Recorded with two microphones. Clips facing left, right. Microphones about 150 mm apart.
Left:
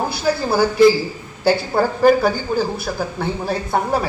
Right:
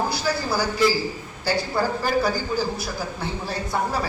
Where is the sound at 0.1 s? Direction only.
55° left (ahead or behind).